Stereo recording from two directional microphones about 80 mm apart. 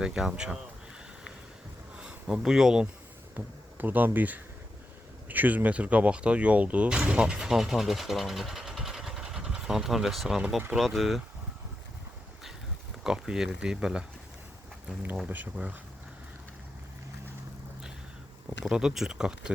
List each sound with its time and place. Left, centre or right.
0.0 s speech: centre
2.0 s speech: centre
3.3 s speech: right; by 11.2 s centre
13.1 s speech: centre
15.3 s speech: centre
18.6 s speech: centre